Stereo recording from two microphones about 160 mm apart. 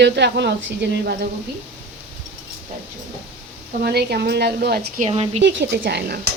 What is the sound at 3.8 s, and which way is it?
Speech, 85° right.